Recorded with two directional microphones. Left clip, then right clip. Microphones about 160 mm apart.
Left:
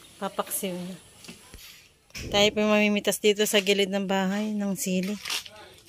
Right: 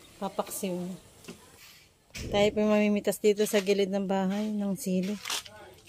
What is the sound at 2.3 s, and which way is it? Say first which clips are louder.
Speech: left 3 dB; centre (ahead or behind).